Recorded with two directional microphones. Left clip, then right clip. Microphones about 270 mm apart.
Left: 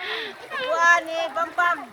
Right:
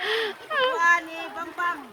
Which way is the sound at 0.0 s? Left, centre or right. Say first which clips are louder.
Right 4 dB; centre.